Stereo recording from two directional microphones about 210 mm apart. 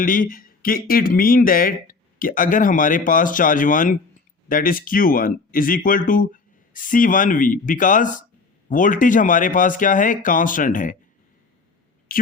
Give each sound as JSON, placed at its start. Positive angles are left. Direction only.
{"t": 0.0, "sound": "speech", "side_deg": 40}
{"t": 12.1, "sound": "speech", "side_deg": 40}